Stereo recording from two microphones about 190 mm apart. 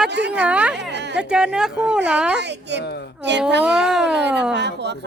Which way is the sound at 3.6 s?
5° right (ahead or behind).